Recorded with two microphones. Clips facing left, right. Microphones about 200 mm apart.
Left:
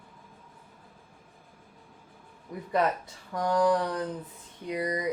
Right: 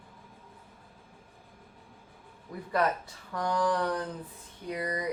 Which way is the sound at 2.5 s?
20° left (ahead or behind).